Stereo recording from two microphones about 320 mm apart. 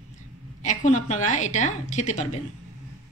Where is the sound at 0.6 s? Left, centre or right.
Left.